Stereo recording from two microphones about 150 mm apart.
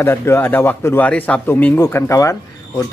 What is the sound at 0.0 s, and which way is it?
A man's voice, 15° left (ahead or behind).